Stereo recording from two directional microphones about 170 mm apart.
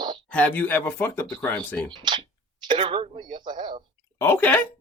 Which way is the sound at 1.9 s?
30° right (ahead or behind).